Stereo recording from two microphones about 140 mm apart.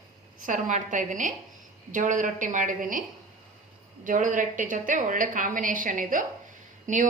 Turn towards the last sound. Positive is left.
turn(degrees=-65)  # may be behind; listen again after turning